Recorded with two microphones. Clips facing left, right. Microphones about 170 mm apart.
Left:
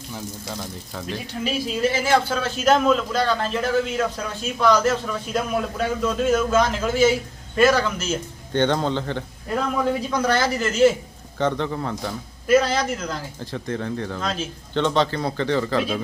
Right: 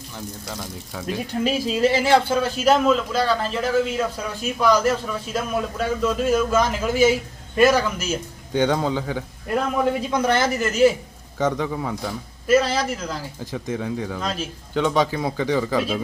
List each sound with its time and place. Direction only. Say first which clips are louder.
0.9 s a man's voice: right 1 dB; 5° right (ahead or behind)
1.8 s a man's voice: right 3 dB; 35° right (ahead or behind)
2.3 s a man's voice: right 1 dB; 10° right (ahead or behind)
9.7 s a man's voice: right 1 dB; 25° right (ahead or behind); by 16.0 s 5° right (ahead or behind)